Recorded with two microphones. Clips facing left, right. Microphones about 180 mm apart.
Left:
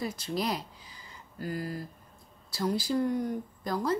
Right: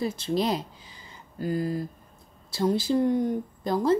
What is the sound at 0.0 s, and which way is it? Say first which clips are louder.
Speech: right 6 dB; 25° right (ahead or behind).